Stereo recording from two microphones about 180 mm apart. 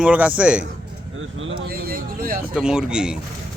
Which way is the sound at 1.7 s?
55° right (ahead or behind).